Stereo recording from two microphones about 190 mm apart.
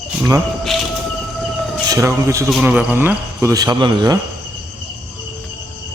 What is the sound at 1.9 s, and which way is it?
Speech, 15° right (ahead or behind).